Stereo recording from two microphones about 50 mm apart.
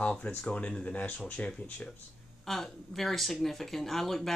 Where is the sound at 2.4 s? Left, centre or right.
Centre.